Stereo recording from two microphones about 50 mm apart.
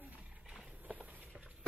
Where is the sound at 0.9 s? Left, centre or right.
Right.